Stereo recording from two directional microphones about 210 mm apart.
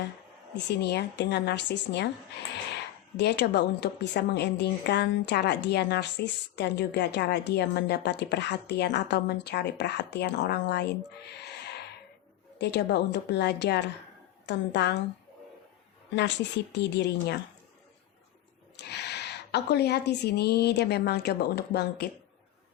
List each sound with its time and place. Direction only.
0.5 s a woman's voice: 55° left (ahead or behind)
11.3 s owl: 50° left (ahead or behind)
12.5 s a woman's voice: 55° left (ahead or behind)
16.7 s a woman's voice: 55° left (ahead or behind)
18.8 s a woman's voice: 50° left (ahead or behind)